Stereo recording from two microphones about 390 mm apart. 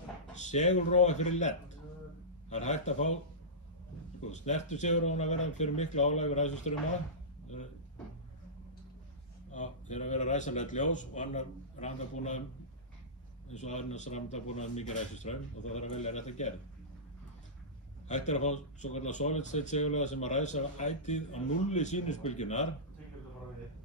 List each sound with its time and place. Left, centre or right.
0.4 s speech: centre
2.5 s speech: centre
4.3 s speech: centre
9.5 s speech: centre
13.5 s speech: centre
18.0 s speech: centre